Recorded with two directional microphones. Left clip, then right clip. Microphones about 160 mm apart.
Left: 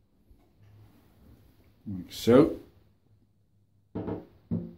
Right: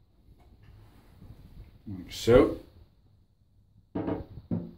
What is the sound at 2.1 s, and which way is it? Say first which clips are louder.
Speech: even; 50° left (ahead or behind).